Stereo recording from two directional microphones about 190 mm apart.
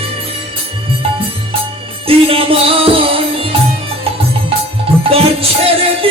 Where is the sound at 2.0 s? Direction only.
30° right (ahead or behind).